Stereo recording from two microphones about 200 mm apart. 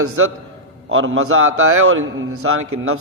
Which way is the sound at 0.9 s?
85° right.